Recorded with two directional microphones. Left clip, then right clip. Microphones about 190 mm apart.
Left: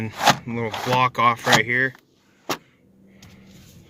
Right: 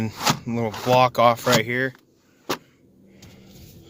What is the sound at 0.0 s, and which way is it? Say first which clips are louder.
Speech: left 5 dB; 10° right (ahead or behind).